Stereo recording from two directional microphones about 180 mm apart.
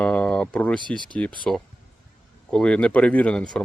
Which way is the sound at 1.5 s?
5° left (ahead or behind).